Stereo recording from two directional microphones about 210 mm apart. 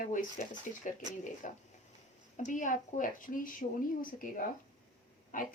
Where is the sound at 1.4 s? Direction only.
35° left (ahead or behind).